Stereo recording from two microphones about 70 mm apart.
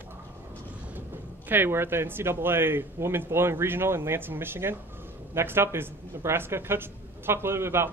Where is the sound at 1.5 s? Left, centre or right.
Right.